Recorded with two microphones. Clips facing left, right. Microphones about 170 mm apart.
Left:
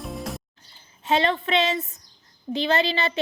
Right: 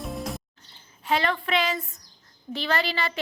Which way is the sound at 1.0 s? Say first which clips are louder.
Left 3 dB; 25° left (ahead or behind).